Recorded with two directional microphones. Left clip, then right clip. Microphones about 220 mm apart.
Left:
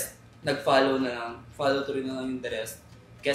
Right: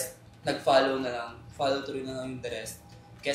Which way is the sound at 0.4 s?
5° left (ahead or behind).